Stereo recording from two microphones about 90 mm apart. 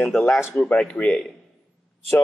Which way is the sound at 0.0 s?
Centre (ahead or behind).